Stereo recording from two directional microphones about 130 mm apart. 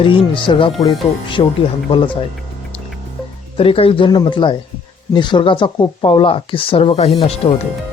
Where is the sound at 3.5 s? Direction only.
45° left (ahead or behind).